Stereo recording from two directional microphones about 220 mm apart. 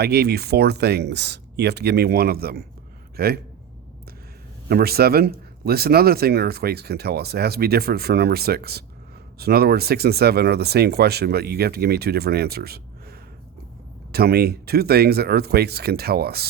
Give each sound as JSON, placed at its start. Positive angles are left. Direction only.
{"t": 0.0, "sound": "speech", "side_deg": -45}
{"t": 4.7, "sound": "speech", "side_deg": -45}